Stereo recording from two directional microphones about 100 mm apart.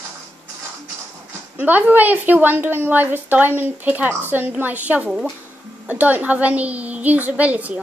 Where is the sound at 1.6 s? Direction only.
20° right (ahead or behind).